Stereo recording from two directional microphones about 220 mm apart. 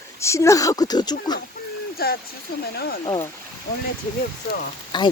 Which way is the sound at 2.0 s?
45° left (ahead or behind).